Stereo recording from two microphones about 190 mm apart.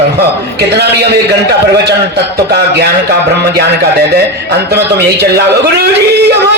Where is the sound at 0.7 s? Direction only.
60° right (ahead or behind).